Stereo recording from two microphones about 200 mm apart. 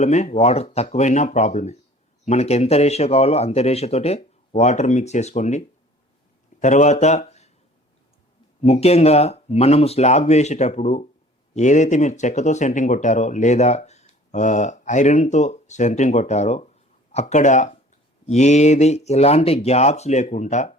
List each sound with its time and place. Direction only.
0.0 s speech: 35° left (ahead or behind)
8.6 s speech: 30° left (ahead or behind)